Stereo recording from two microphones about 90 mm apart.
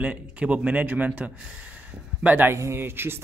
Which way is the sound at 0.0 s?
15° right (ahead or behind).